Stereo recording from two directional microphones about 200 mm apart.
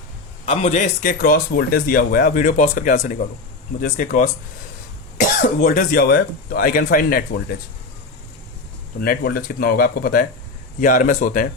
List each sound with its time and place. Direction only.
0.4 s speech: 35° left (ahead or behind)
1.2 s speech: 50° left (ahead or behind)
9.0 s speech: 50° left (ahead or behind)